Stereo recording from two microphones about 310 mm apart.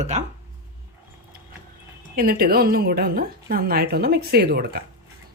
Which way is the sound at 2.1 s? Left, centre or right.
Right.